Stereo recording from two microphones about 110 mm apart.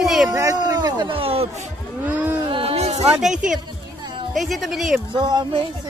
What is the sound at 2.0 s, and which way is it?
Speech, 15° right (ahead or behind).